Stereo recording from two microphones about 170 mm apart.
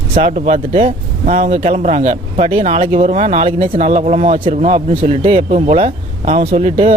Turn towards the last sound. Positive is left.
turn(degrees=-35)  # may be behind; listen again after turning